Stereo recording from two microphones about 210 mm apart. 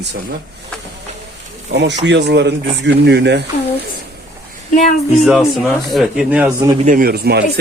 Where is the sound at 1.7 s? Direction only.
55° right (ahead or behind).